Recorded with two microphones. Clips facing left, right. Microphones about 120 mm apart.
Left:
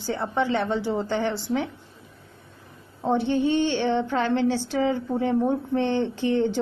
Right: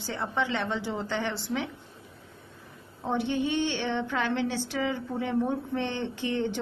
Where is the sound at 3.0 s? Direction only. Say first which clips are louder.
Left 6 dB; 40° left (ahead or behind).